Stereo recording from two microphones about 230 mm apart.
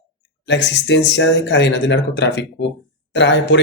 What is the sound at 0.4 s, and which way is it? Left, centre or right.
Speech, left.